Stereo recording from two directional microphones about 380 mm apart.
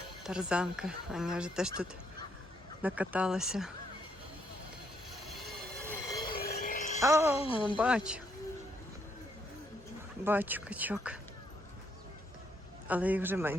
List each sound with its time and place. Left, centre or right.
0.2 s speech: centre
5.3 s train wheels squealing: centre
6.3 s a sound: left
7.0 s speech: centre
10.2 s speech: centre
12.9 s speech: centre